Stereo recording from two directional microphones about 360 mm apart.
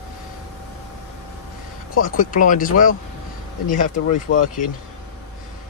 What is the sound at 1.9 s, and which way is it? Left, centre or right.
Speech, left.